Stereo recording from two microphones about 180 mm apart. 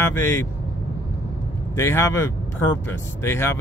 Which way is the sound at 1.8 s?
15° left (ahead or behind).